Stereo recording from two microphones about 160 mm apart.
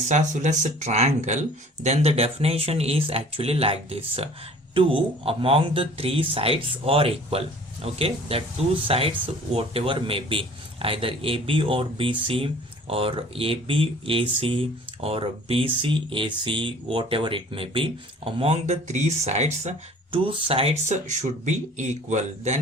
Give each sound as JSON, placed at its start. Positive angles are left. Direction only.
{"t": 0.1, "sound": "speech", "side_deg": -50}